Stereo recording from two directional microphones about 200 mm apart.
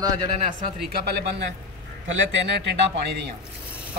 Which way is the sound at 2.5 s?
55° right (ahead or behind).